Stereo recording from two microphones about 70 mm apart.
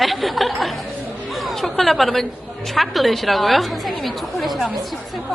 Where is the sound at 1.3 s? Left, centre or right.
Centre.